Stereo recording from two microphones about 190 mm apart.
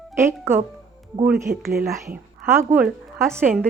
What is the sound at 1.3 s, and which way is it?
Speech, 55° right (ahead or behind).